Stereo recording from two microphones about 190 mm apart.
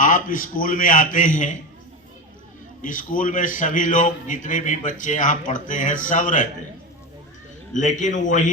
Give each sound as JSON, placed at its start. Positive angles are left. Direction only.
{"t": 0.0, "sound": "a man's voice", "side_deg": 45}
{"t": 2.8, "sound": "a man's voice", "side_deg": 45}
{"t": 7.7, "sound": "a man's voice", "side_deg": 40}